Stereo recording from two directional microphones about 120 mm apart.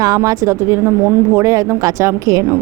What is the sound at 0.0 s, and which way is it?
A woman's voice, 30° right (ahead or behind).